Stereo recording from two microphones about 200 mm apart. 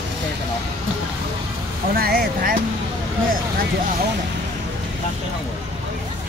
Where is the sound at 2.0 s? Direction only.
50° right (ahead or behind).